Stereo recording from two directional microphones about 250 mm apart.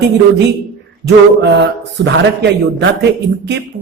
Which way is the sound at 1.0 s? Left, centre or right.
Right.